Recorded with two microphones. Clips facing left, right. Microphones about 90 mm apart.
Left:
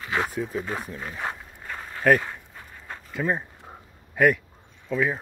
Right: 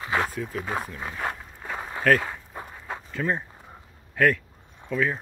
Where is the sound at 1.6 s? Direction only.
15° right (ahead or behind).